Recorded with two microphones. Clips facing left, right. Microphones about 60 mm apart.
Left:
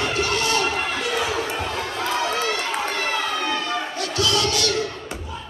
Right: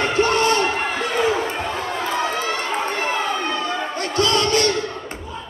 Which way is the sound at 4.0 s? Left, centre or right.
Right.